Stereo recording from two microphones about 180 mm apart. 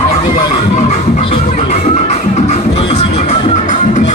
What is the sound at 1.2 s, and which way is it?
Music, 30° left (ahead or behind).